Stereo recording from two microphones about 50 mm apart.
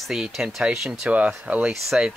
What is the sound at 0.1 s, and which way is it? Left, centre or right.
Speech, centre.